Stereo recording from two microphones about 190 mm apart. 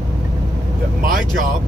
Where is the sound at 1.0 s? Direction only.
45° right (ahead or behind).